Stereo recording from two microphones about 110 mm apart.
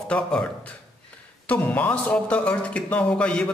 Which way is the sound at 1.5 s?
15° left (ahead or behind).